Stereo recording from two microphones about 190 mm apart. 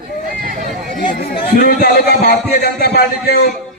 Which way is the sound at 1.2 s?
55° left (ahead or behind).